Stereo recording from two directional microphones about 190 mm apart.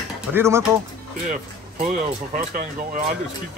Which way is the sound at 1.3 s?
40° right (ahead or behind).